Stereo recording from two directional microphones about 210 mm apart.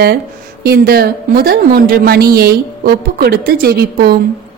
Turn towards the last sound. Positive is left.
turn(degrees=-50)  # may be behind; listen again after turning